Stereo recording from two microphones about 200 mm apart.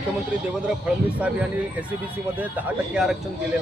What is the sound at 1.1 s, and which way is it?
Speech, 5° right (ahead or behind).